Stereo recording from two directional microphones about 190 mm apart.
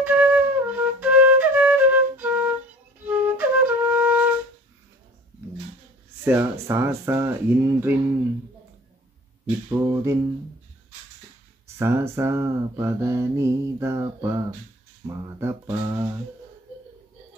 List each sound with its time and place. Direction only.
0.0 s flute: 10° right (ahead or behind)
6.2 s mantra: 15° right (ahead or behind)
9.7 s mantra: 15° right (ahead or behind)
11.8 s mantra: 15° right (ahead or behind)